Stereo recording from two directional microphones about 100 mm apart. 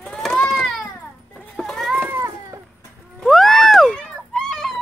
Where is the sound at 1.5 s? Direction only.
5° left (ahead or behind).